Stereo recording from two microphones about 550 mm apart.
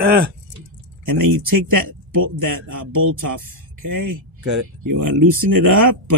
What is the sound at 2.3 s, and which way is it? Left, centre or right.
Speech, right.